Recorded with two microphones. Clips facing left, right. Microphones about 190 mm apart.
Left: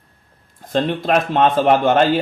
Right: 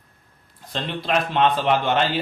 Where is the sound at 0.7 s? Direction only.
45° left (ahead or behind).